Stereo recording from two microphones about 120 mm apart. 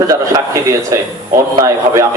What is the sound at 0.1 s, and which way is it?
A man's voice, 25° right (ahead or behind).